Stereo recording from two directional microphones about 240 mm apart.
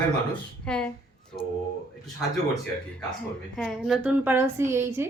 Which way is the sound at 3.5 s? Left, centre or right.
Centre.